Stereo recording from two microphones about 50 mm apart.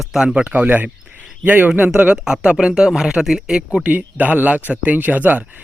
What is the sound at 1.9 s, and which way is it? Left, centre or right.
Speech, centre.